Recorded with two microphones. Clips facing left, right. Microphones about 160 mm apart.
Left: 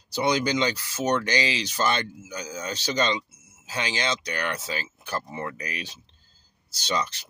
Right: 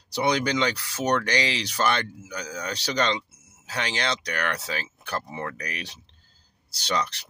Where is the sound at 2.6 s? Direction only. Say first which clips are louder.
Even; 70° right (ahead or behind).